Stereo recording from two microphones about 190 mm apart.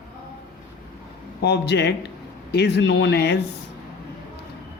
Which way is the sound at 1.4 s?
60° left (ahead or behind).